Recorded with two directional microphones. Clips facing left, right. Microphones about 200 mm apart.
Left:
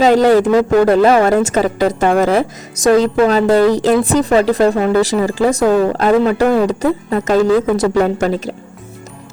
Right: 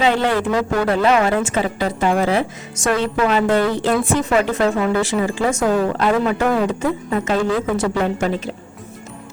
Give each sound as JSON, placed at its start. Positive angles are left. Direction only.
{"t": 0.0, "sound": "a woman's voice", "side_deg": 40}